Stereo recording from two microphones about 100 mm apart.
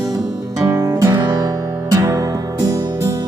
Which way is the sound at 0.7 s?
40° right (ahead or behind).